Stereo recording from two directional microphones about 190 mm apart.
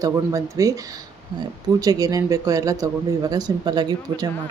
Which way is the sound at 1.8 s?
20° right (ahead or behind).